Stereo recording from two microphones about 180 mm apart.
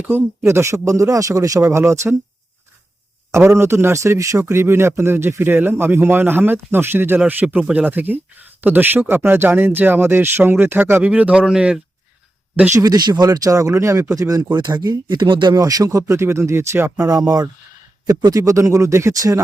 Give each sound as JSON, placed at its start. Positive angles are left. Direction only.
{"t": 0.0, "sound": "a man's voice", "side_deg": -15}
{"t": 3.3, "sound": "a man's voice", "side_deg": -15}
{"t": 12.8, "sound": "speech", "side_deg": -20}